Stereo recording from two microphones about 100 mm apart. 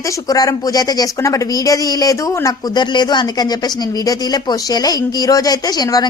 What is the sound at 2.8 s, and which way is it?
A woman's voice, 45° left (ahead or behind).